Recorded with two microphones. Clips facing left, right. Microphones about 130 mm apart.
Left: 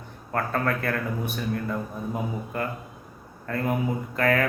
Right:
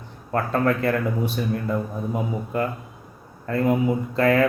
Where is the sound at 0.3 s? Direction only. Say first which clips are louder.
Right 5 dB; 25° right (ahead or behind).